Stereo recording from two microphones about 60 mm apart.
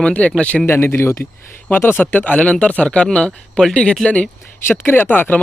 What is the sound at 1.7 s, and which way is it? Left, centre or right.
Speech, left.